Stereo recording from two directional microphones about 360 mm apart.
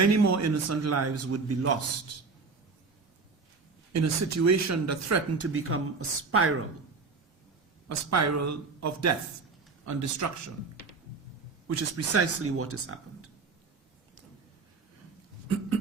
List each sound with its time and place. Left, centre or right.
0.0 s speech: right
3.9 s speech: right
7.9 s a man's voice: right
11.7 s speech: right